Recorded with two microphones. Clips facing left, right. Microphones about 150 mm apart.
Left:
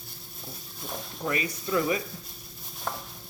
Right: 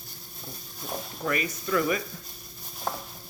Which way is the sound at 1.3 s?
30° left (ahead or behind).